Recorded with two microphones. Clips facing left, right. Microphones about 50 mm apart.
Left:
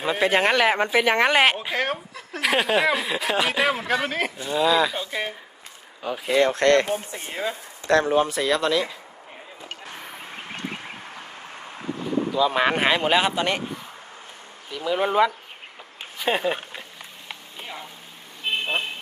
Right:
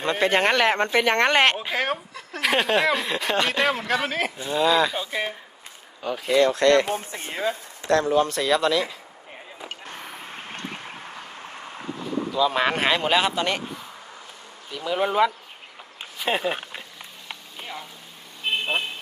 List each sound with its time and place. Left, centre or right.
0.0 s speech: centre
6.4 s speech: left
7.0 s speech: right
7.9 s speech: left
8.3 s speech: centre
12.3 s speech: centre
14.8 s speech: centre
17.2 s a sound: centre